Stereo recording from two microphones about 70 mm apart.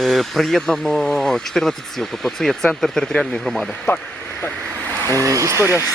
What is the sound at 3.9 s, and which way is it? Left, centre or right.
Speech, left.